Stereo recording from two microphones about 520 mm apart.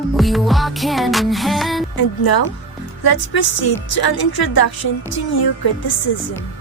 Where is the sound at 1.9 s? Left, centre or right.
Left.